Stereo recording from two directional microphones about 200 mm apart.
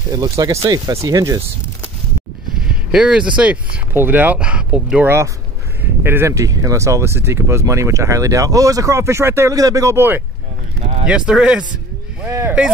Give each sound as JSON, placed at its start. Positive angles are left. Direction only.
{"t": 0.1, "sound": "speech", "side_deg": -15}
{"t": 2.5, "sound": "speech", "side_deg": -5}
{"t": 10.8, "sound": "a sound", "side_deg": -30}
{"t": 11.1, "sound": "speech", "side_deg": -5}